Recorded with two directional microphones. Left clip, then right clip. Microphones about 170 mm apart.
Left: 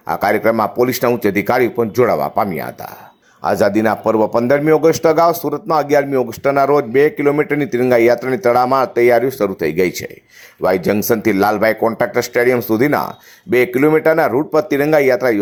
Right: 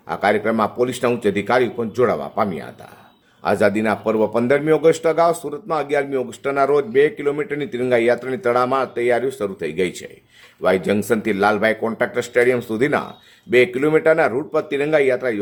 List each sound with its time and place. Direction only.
0.1 s a man's voice: 45° left (ahead or behind)